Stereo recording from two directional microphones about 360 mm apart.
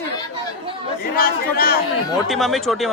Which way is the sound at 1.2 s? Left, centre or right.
Left.